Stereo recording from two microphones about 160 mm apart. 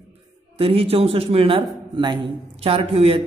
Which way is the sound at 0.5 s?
35° right (ahead or behind).